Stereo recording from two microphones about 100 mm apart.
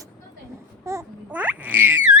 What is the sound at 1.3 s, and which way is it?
Frog, 15° right (ahead or behind).